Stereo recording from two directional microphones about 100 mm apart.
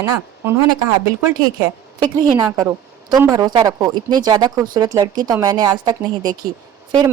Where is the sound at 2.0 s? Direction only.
40° right (ahead or behind).